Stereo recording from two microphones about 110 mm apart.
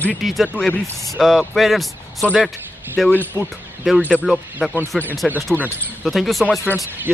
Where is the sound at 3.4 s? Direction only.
25° right (ahead or behind).